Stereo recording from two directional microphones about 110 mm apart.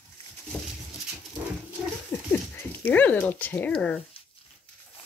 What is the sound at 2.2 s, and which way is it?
Speech, 20° left (ahead or behind).